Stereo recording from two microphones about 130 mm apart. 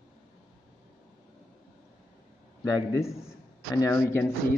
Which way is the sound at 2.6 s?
25° left (ahead or behind).